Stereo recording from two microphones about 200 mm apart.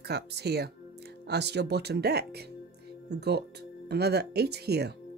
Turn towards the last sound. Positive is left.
turn(degrees=-55)  # may be behind; listen again after turning